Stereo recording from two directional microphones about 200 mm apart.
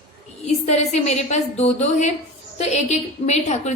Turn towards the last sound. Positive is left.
turn(degrees=35)  # may be behind; listen again after turning